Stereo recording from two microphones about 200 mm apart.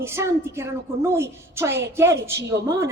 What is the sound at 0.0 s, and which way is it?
Speech, 15° right (ahead or behind).